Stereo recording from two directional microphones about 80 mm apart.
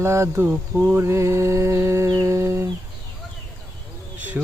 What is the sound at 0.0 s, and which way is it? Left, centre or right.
Mantra, right.